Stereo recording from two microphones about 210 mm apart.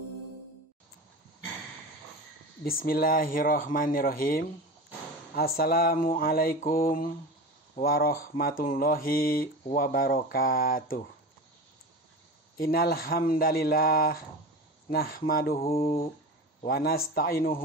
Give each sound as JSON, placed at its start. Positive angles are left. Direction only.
{"t": 2.6, "sound": "speech", "side_deg": 45}
{"t": 12.5, "sound": "speech", "side_deg": 45}
{"t": 15.6, "sound": "a sound", "side_deg": 30}
{"t": 16.6, "sound": "speech", "side_deg": 45}